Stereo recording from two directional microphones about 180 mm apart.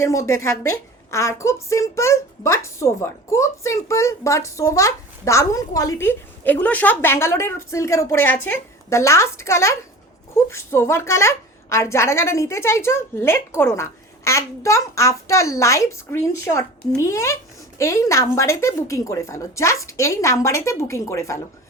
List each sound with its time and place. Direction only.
0.0 s a woman's voice: 15° left (ahead or behind)